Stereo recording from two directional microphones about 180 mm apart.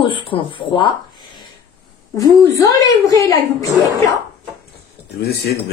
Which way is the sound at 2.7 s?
20° left (ahead or behind).